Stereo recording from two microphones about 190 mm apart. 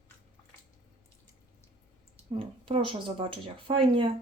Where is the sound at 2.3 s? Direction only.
30° right (ahead or behind).